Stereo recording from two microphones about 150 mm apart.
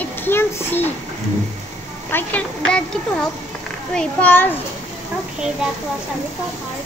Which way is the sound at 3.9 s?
10° left (ahead or behind).